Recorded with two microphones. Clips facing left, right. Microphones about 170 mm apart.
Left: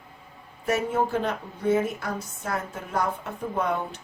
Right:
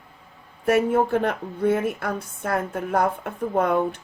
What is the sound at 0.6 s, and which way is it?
A woman's voice, 55° right (ahead or behind).